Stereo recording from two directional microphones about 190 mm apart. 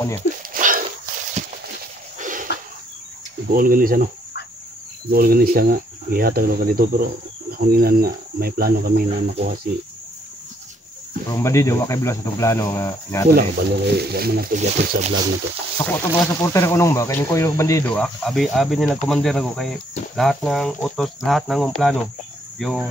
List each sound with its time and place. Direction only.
0.5 s a sound: 45° right (ahead or behind)
3.5 s speech: 45° right (ahead or behind)
5.1 s speech: 50° right (ahead or behind)
11.2 s speech: 15° left (ahead or behind)
13.3 s speech: 55° right (ahead or behind)
15.0 s speech: 35° right (ahead or behind)
15.8 s speech: 10° left (ahead or behind)
17.8 s speech: 5° left (ahead or behind)